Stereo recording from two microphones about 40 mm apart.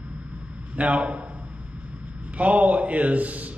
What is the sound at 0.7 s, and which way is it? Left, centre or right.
Speech, right.